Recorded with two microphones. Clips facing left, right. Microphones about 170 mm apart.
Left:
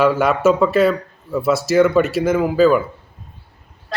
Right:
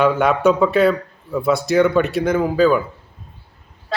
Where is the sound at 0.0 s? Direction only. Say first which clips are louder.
Even; centre (ahead or behind).